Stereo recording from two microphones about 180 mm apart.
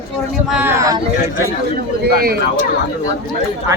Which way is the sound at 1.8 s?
60° right (ahead or behind).